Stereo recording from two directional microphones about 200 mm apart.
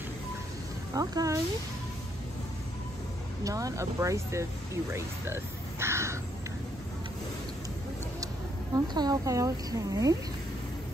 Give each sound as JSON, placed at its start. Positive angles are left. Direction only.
{"t": 0.9, "sound": "speech", "side_deg": -15}
{"t": 3.4, "sound": "speech", "side_deg": -15}
{"t": 8.7, "sound": "speech", "side_deg": -20}